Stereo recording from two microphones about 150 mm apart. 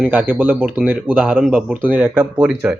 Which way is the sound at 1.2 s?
10° right (ahead or behind).